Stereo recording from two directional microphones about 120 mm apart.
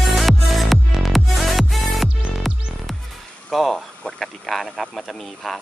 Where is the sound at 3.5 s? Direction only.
Centre (ahead or behind).